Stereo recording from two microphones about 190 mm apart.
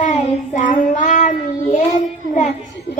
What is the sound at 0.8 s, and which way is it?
Child singing, 40° left (ahead or behind).